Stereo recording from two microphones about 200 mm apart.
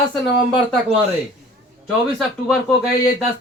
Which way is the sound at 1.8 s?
Centre (ahead or behind).